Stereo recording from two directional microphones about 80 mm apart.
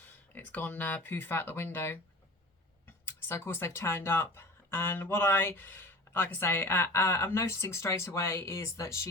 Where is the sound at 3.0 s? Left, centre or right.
Left.